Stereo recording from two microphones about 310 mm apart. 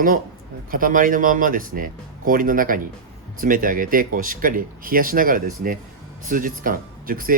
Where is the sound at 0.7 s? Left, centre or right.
Right.